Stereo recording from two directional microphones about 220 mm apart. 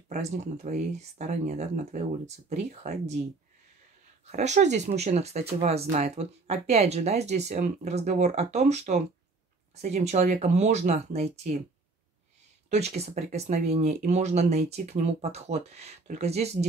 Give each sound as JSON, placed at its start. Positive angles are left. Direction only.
{"t": 0.1, "sound": "speech", "side_deg": -35}
{"t": 4.3, "sound": "speech", "side_deg": -30}
{"t": 12.6, "sound": "speech", "side_deg": -30}